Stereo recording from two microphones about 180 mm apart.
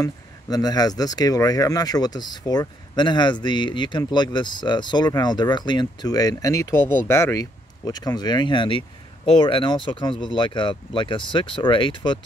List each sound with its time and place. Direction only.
0.0 s speech: 20° left (ahead or behind)